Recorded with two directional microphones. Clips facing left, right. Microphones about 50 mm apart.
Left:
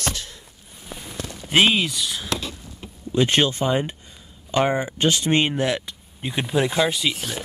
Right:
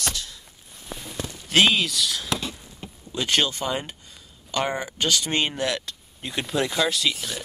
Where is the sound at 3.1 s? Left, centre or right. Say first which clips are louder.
Left 5 dB; left.